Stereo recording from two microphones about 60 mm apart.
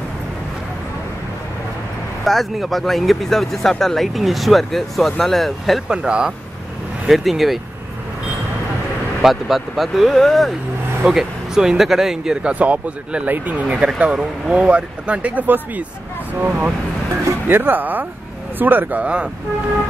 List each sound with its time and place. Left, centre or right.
2.2 s speech: centre
5.9 s speech: centre
7.1 s speech: centre
9.2 s speech: centre
11.1 s speech: centre
12.4 s speech: right